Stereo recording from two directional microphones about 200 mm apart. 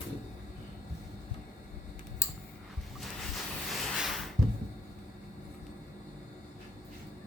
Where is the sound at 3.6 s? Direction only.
Centre (ahead or behind).